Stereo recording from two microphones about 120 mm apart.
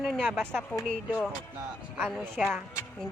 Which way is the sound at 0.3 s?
15° right (ahead or behind).